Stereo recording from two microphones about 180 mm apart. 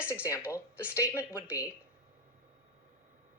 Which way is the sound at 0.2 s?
15° left (ahead or behind).